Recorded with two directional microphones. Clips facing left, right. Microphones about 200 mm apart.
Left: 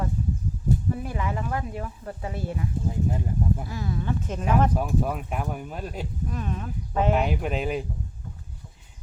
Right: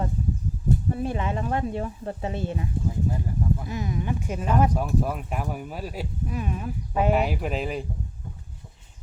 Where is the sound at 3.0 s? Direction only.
20° left (ahead or behind).